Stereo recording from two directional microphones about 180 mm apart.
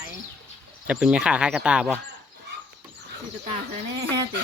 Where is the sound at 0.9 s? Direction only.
5° right (ahead or behind).